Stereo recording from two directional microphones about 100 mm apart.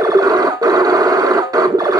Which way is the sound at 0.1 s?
40° right (ahead or behind).